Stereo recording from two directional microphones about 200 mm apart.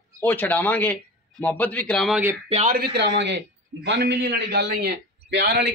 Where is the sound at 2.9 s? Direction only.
60° right (ahead or behind).